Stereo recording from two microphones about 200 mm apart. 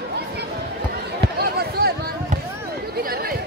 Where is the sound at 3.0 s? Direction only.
50° right (ahead or behind).